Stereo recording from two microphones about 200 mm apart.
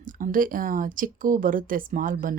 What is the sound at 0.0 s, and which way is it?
Speech, 40° right (ahead or behind).